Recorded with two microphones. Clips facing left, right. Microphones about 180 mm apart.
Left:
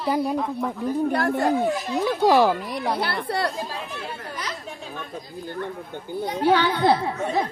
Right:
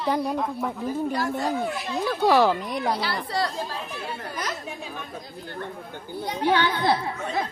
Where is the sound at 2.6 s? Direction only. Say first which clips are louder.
Even; centre (ahead or behind).